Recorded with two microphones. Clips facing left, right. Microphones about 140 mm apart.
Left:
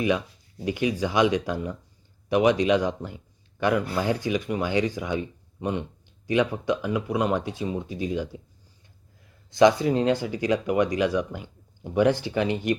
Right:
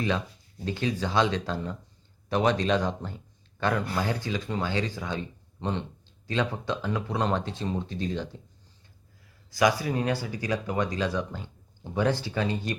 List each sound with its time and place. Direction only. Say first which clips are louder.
0.6 s speech: left 4 dB; 15° left (ahead or behind)
9.5 s speech: left 6 dB; 25° left (ahead or behind)